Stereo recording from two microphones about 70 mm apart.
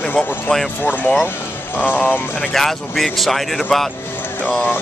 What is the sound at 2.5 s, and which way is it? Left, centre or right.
Speech, centre.